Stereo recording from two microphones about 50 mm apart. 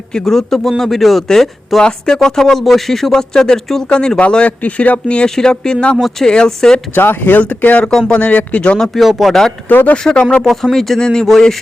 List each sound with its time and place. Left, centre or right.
0.1 s speech: centre
1.8 s speech: centre
6.0 s speech: centre
6.2 s speech: centre
6.9 s speech: left
7.5 s speech: left
7.9 s speech: centre
8.1 s speech: left
8.9 s speech: centre
9.6 s speech: left
9.9 s speech: centre
10.4 s speech: centre